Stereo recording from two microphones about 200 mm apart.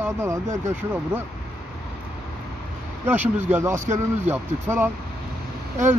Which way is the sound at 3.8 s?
35° right (ahead or behind).